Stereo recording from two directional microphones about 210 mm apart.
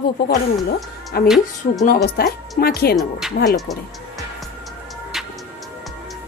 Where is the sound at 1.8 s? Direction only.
45° left (ahead or behind).